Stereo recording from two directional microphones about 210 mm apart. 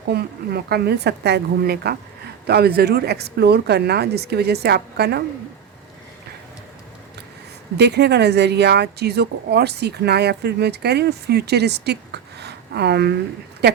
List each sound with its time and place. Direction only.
0.1 s speech: 50° right (ahead or behind)
7.8 s speech: 50° right (ahead or behind)